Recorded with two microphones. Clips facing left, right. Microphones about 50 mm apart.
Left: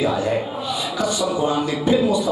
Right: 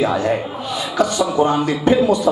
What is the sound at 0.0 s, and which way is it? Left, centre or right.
A man's voice, right.